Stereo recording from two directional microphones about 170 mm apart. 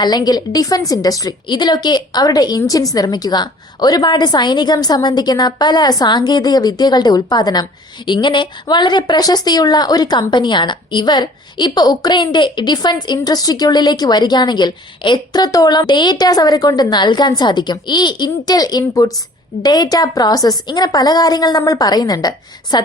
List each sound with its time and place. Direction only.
0.0 s a woman's voice: 25° left (ahead or behind)